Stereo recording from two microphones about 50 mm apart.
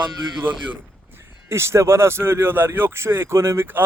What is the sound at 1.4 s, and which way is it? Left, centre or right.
Speech, right.